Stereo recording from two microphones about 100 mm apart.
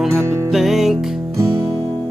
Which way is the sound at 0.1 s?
25° right (ahead or behind).